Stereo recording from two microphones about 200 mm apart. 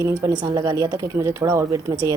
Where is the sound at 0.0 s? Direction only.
15° right (ahead or behind).